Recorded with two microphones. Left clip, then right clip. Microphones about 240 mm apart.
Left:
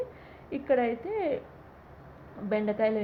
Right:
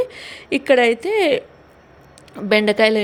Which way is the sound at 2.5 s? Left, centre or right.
Right.